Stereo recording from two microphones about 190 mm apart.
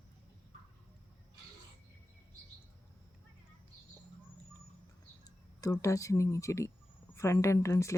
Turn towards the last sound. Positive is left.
turn(degrees=15)  # may be behind; listen again after turning